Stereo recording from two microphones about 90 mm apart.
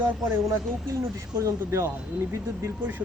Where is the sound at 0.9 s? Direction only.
35° right (ahead or behind).